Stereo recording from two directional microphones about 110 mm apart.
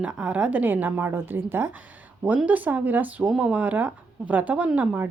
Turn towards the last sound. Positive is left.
turn(degrees=-10)  # may be behind; listen again after turning